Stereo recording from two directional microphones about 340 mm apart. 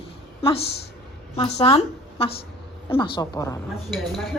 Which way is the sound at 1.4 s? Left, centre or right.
Centre.